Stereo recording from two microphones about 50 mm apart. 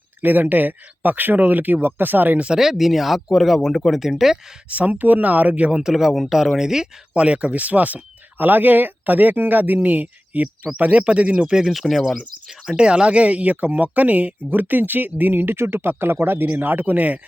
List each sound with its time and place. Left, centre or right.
0.2 s speech: right
2.6 s speech: centre
4.7 s speech: right
5.7 s speech: centre
7.1 s speech: right
11.7 s speech: centre
12.7 s speech: centre; by 15.5 s right
15.5 s speech: right